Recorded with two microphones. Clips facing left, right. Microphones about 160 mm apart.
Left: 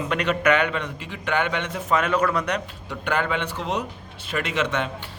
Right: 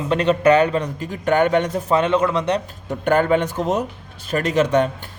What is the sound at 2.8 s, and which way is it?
A man's voice, 45° right (ahead or behind).